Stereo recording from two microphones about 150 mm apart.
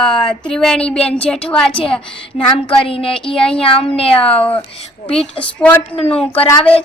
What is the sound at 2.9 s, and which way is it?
Speech, 40° left (ahead or behind).